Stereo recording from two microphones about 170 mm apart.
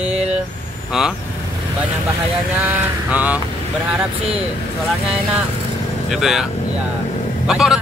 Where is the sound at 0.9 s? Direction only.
Centre (ahead or behind).